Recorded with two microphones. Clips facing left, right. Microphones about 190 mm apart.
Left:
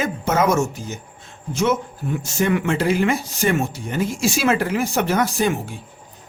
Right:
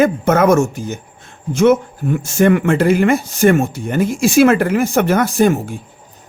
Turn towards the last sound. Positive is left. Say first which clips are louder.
# right 6 dB
turn(degrees=-50)  # may be behind; listen again after turning